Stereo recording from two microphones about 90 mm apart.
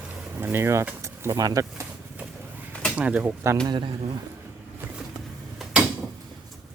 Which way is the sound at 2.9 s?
15° right (ahead or behind).